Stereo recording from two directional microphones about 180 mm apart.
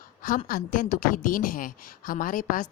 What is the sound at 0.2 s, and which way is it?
A woman's voice, 50° left (ahead or behind).